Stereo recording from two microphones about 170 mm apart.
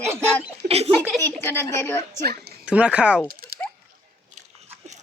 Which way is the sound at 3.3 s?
60° right (ahead or behind).